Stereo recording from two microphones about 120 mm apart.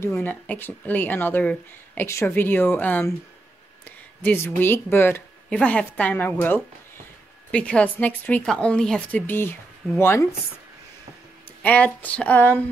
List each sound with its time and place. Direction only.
0.2 s speech: 15° left (ahead or behind)
9.2 s speech: 20° left (ahead or behind)
11.6 s speech: 10° left (ahead or behind)